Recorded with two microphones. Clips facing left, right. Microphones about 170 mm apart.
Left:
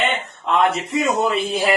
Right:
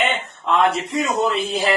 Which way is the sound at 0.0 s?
Centre (ahead or behind).